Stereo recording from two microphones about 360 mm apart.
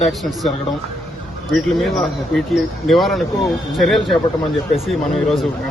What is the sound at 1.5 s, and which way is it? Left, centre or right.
Speech, centre.